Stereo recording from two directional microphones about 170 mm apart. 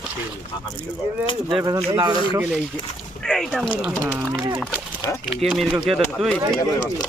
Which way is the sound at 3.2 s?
5° left (ahead or behind).